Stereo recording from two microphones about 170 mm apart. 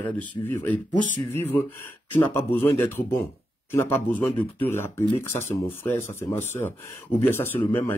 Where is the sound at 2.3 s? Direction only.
15° left (ahead or behind).